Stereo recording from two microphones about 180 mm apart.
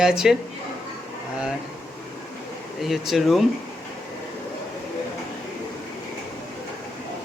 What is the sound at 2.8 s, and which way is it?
Speech, centre (ahead or behind).